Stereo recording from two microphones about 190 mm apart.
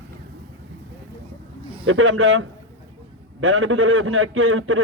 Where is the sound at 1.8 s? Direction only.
90° right.